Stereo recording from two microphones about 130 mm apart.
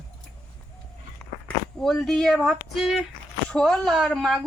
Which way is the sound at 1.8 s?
5° left (ahead or behind).